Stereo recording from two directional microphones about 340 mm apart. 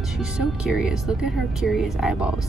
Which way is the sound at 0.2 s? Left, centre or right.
Centre.